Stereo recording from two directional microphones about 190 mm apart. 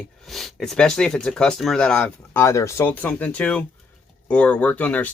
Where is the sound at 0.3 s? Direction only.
Centre (ahead or behind).